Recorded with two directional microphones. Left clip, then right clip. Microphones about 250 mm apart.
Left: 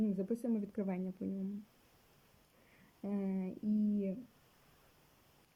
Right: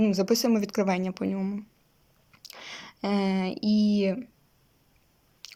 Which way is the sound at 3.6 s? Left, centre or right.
Right.